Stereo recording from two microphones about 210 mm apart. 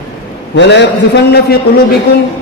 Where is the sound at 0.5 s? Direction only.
55° left (ahead or behind).